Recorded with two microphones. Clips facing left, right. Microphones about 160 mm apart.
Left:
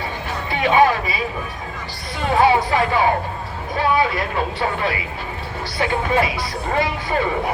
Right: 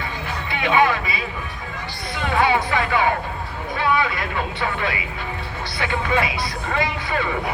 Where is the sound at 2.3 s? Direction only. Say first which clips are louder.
Left 4 dB; 35° left (ahead or behind).